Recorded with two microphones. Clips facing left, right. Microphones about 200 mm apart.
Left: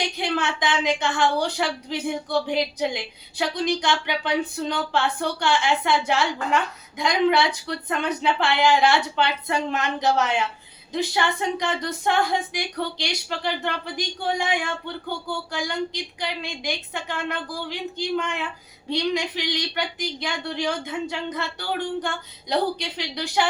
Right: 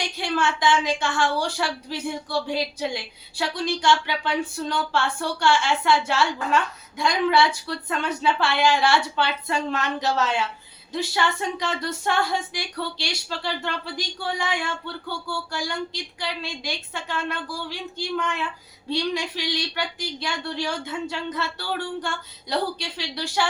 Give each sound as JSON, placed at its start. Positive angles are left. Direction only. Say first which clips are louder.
{"t": 0.0, "sound": "a woman's voice", "louder": "even", "side_deg": 20}